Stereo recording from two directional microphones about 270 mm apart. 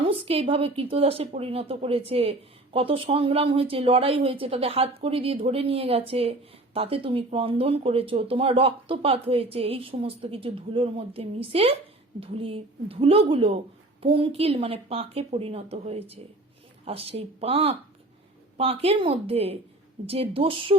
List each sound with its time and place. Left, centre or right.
0.0 s speech: right